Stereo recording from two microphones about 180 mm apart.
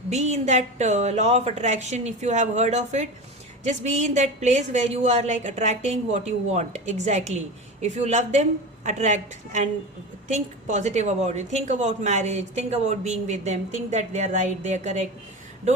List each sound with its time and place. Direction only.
0.1 s a woman's voice: 40° right (ahead or behind)